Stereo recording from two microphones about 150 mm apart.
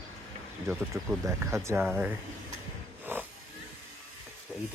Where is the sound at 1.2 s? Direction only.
20° right (ahead or behind).